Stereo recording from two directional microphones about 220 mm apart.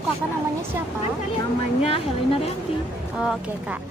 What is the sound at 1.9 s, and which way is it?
Speech, 25° left (ahead or behind).